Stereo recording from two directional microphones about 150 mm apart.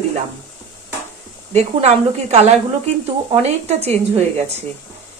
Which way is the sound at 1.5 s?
45° right (ahead or behind).